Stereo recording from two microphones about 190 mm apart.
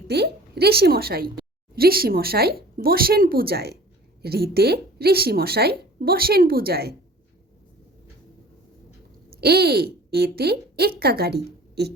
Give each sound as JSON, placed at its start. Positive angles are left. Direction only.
{"t": 0.1, "sound": "speech", "side_deg": -60}
{"t": 9.4, "sound": "a woman's voice", "side_deg": -55}